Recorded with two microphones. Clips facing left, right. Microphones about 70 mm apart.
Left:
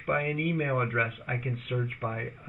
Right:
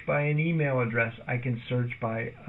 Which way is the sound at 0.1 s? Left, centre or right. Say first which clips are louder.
Right 1 dB; right.